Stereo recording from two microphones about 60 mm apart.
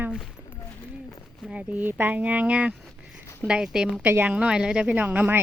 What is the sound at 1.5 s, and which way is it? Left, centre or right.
Speech, right.